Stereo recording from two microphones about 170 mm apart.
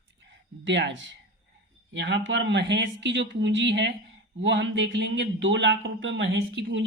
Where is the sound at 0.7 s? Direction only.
90° right.